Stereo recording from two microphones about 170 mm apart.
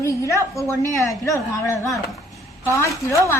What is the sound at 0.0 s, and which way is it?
A woman's voice, 15° left (ahead or behind).